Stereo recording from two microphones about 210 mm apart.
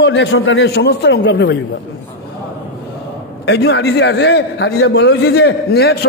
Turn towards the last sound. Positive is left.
turn(degrees=50)  # may be behind; listen again after turning